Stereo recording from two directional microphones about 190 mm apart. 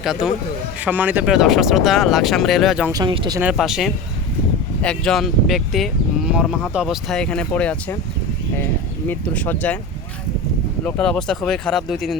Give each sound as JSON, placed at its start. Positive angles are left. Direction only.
{"t": 0.0, "sound": "speech", "side_deg": 0}
{"t": 2.9, "sound": "speech", "side_deg": -20}
{"t": 3.4, "sound": "speech", "side_deg": 0}
{"t": 9.0, "sound": "speech", "side_deg": 10}
{"t": 10.8, "sound": "speech", "side_deg": 5}